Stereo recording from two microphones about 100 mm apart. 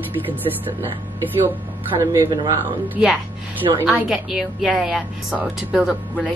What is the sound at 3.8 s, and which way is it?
A woman's voice, 10° right (ahead or behind).